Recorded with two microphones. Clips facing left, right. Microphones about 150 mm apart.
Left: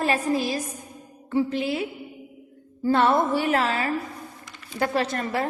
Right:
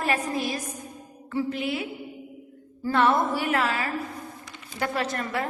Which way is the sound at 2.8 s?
30° left (ahead or behind).